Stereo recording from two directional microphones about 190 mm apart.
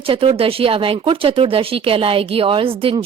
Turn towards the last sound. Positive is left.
turn(degrees=-30)  # may be behind; listen again after turning